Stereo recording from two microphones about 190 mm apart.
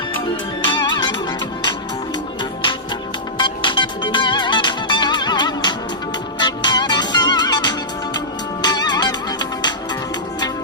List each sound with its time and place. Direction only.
0.6 s music: 25° left (ahead or behind)
3.3 s music: 25° left (ahead or behind)